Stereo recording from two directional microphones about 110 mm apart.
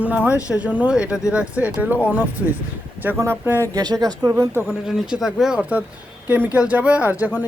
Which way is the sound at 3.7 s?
35° right (ahead or behind).